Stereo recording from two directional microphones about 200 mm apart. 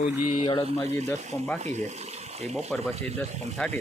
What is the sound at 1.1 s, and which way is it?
Speech, 10° left (ahead or behind).